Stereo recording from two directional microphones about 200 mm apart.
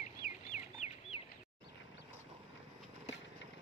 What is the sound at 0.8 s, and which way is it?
Bird, 35° left (ahead or behind).